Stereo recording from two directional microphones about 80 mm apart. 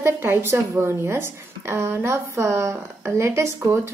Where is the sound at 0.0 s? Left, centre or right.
Right.